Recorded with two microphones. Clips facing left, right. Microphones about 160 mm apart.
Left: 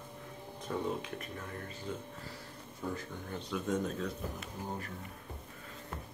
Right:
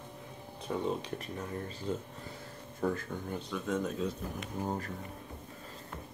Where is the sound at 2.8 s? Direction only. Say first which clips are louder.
Right 6 dB; 55° right (ahead or behind).